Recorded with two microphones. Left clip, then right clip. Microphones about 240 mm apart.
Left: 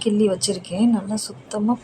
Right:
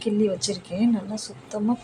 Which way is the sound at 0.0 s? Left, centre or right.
Centre.